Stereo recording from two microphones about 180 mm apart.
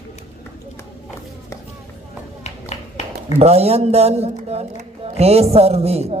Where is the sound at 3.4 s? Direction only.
35° right (ahead or behind).